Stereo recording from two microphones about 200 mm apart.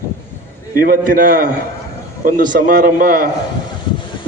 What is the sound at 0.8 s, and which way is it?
A man's voice, 45° right (ahead or behind).